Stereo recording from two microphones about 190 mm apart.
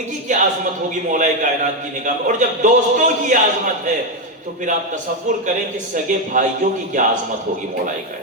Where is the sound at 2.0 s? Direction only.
40° right (ahead or behind).